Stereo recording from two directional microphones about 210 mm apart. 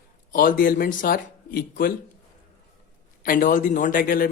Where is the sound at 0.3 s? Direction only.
40° left (ahead or behind).